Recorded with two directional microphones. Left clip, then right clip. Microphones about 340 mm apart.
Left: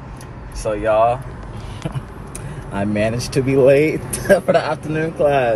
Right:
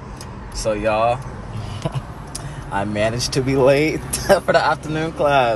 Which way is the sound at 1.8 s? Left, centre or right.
Right.